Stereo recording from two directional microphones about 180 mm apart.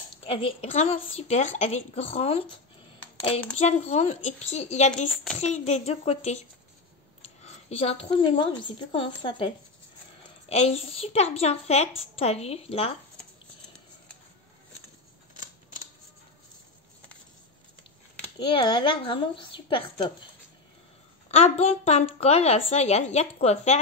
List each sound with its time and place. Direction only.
0.2 s a woman's voice: 30° left (ahead or behind)
4.9 s a child's voice: centre (ahead or behind)
5.4 s a woman's voice: 40° left (ahead or behind)
10.5 s a woman's voice: 35° left (ahead or behind)
18.4 s a woman's voice: 30° left (ahead or behind)
21.3 s a woman's voice: 35° left (ahead or behind)